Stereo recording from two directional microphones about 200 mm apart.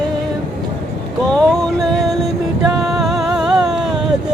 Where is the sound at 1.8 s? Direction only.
Centre (ahead or behind).